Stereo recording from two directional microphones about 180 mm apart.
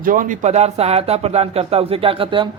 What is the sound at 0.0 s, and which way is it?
Speech, 50° right (ahead or behind).